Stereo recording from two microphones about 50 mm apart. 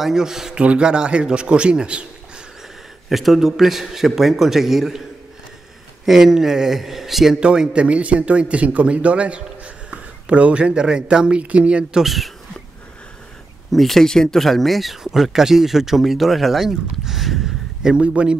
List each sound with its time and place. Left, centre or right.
0.0 s a man's voice: centre
3.1 s a man's voice: centre
6.0 s a man's voice: centre
7.3 s speech: centre
12.0 s speech: centre
13.7 s speech: centre
17.9 s speech: right